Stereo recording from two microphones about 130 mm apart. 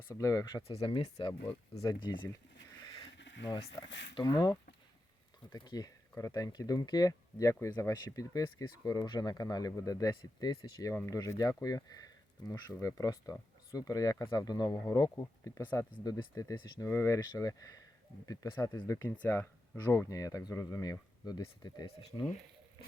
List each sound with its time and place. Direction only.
0.1 s speech: 25° left (ahead or behind)
0.8 s speech: 40° left (ahead or behind)
1.4 s speech: 55° left (ahead or behind)
1.8 s speech: 35° left (ahead or behind)
3.6 s speech: 45° left (ahead or behind); by 15.6 s 25° left (ahead or behind)
15.6 s speech: 15° left (ahead or behind)
16.0 s speech: 25° left (ahead or behind)
18.3 s speech: 40° left (ahead or behind)
18.6 s speech: 25° left (ahead or behind)